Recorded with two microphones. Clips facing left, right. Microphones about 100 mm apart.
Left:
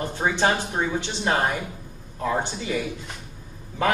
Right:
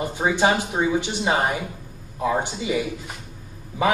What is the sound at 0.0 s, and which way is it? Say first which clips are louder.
A woman's voice: right 2 dB; 10° right (ahead or behind).